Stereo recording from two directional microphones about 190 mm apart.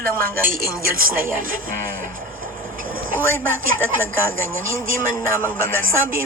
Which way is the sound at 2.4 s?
50° right (ahead or behind).